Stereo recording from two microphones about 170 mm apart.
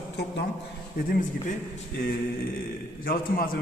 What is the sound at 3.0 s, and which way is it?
Speech, 60° left (ahead or behind).